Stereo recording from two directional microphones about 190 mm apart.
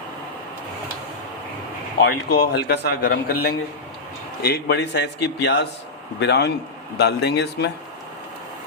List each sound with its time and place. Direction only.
2.0 s speech: 60° left (ahead or behind)